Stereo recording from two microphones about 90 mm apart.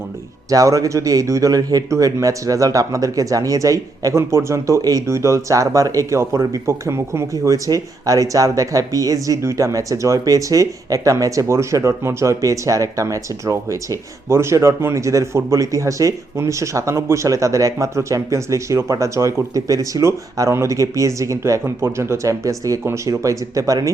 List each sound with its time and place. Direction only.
0.5 s speech: 40° right (ahead or behind)